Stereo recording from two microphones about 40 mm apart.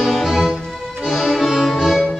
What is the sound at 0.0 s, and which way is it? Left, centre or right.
Music, centre.